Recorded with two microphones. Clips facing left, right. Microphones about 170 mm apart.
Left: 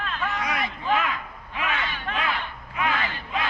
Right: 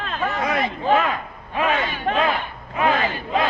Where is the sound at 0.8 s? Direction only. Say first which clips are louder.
Right 6 dB; 40° right (ahead or behind).